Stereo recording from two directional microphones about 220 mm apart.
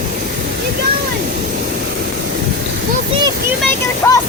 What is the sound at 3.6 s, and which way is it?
Speech, 10° left (ahead or behind).